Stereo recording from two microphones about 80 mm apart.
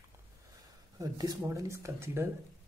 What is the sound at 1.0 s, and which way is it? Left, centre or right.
Speech, right.